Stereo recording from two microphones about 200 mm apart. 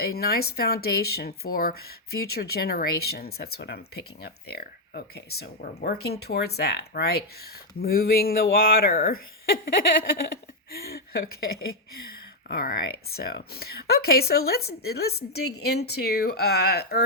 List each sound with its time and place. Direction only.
0.0 s speech: 50° left (ahead or behind)